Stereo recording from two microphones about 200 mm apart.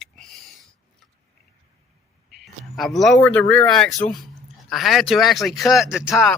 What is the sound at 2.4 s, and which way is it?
Speech, centre (ahead or behind).